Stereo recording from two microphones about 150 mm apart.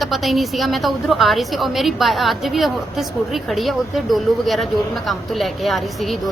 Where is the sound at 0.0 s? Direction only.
Centre (ahead or behind).